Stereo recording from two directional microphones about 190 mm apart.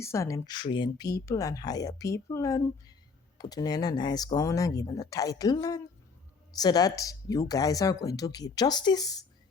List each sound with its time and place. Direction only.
0.0 s speech: 15° left (ahead or behind)